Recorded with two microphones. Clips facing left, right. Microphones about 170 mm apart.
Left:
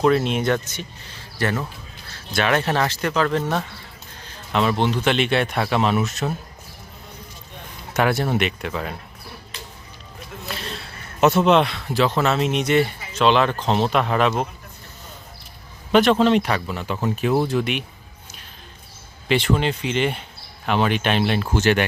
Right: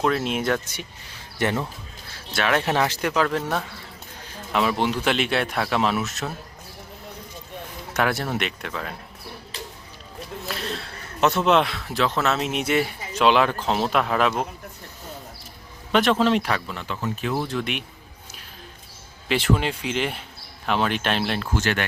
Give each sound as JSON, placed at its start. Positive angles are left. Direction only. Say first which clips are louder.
{"t": 0.0, "sound": "speech", "louder": "left 4 dB", "side_deg": 0}
{"t": 2.3, "sound": "speech", "louder": "left 2 dB", "side_deg": 0}
{"t": 7.9, "sound": "speech", "louder": "left 4 dB", "side_deg": 5}
{"t": 10.4, "sound": "speech", "louder": "right 1 dB", "side_deg": 0}
{"t": 15.9, "sound": "speech", "louder": "left 4 dB", "side_deg": 0}
{"t": 17.5, "sound": "speech", "louder": "left 5 dB", "side_deg": 5}
{"t": 19.3, "sound": "speech", "louder": "left 2 dB", "side_deg": -5}
{"t": 21.5, "sound": "speech", "louder": "left 7 dB", "side_deg": 20}